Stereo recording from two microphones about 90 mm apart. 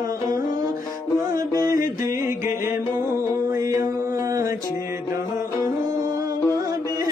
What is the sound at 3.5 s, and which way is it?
Music, 35° right (ahead or behind).